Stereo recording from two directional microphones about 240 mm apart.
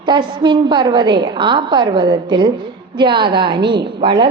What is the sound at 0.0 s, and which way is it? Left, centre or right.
A woman's voice, centre.